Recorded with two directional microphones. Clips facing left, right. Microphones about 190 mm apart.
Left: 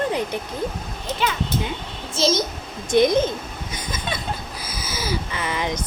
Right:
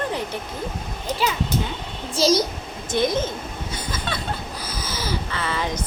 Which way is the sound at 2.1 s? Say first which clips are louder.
Right 2 dB; 35° right (ahead or behind).